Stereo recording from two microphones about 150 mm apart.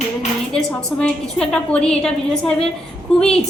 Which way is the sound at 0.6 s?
5° left (ahead or behind).